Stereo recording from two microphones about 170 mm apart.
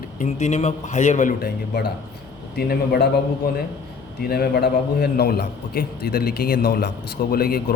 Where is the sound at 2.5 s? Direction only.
75° left (ahead or behind).